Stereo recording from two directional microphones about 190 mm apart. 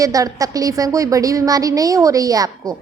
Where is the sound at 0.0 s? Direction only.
15° right (ahead or behind).